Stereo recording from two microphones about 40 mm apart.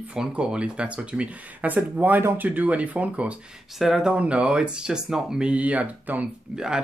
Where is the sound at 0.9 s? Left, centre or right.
Right.